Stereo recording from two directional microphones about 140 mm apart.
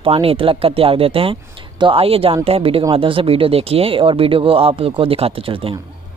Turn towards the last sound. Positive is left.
turn(degrees=-40)  # may be behind; listen again after turning